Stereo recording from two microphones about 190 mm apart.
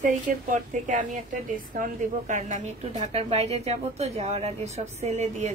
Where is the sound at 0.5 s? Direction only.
40° right (ahead or behind).